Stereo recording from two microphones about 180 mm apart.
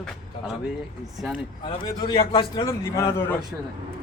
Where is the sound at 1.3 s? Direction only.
25° left (ahead or behind).